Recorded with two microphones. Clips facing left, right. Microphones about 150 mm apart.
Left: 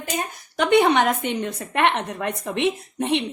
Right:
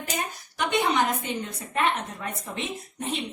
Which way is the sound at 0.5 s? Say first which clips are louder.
Left 7 dB; 65° left (ahead or behind).